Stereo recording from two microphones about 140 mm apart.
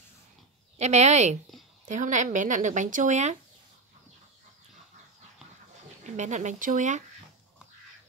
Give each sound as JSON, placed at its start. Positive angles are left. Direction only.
{"t": 0.7, "sound": "a woman's voice", "side_deg": -55}
{"t": 6.0, "sound": "speech", "side_deg": -60}